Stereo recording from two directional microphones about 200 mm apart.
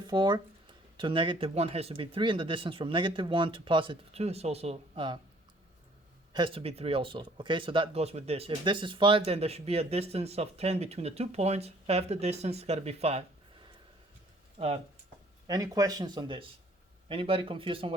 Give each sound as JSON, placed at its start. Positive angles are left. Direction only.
{"t": 0.1, "sound": "speech", "side_deg": -20}
{"t": 6.3, "sound": "speech", "side_deg": -25}
{"t": 14.6, "sound": "speech", "side_deg": -25}